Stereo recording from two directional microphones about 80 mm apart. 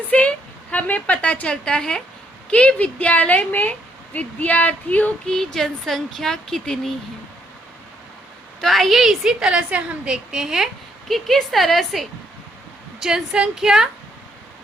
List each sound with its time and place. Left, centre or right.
0.1 s a woman's voice: centre
8.6 s a woman's voice: centre